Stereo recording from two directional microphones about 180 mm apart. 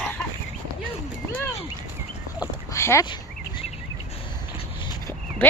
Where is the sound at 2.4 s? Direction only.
15° left (ahead or behind).